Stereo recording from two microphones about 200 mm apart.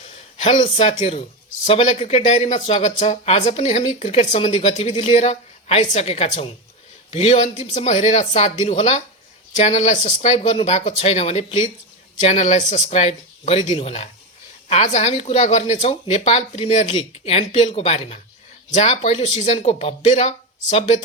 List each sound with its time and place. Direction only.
0.6 s speech: 25° left (ahead or behind)